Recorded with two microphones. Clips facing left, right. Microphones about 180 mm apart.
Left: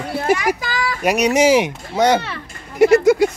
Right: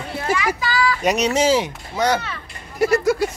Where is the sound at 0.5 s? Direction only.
45° left (ahead or behind).